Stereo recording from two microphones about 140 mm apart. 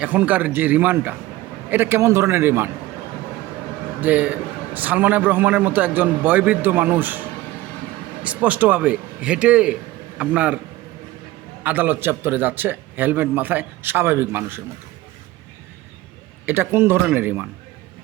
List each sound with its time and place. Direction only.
0.0 s a man's voice: 10° right (ahead or behind)
4.0 s a man's voice: 10° right (ahead or behind)
11.6 s a man's voice: 15° right (ahead or behind)
16.5 s a man's voice: 15° right (ahead or behind)